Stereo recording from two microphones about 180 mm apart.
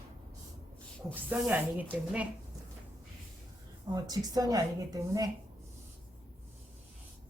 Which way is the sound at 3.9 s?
20° right (ahead or behind).